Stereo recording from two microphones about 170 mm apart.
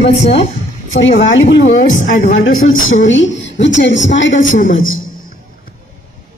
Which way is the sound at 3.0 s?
90° left.